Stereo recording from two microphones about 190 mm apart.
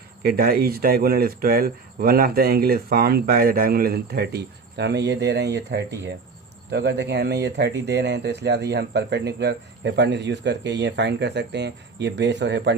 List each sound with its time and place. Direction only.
0.2 s speech: 50° right (ahead or behind)